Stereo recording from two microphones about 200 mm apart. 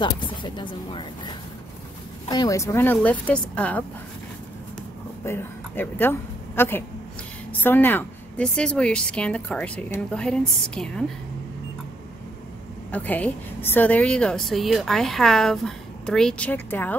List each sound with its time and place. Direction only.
0.0 s a sound: 25° left (ahead or behind)
2.2 s speech: 20° left (ahead or behind)
5.2 s a woman's voice: 10° left (ahead or behind)
12.9 s a woman's voice: 10° left (ahead or behind)